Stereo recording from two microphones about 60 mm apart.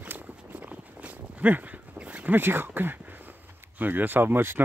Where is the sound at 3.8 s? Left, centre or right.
Right.